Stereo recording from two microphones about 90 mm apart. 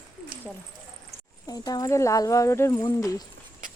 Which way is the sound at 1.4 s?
45° left (ahead or behind).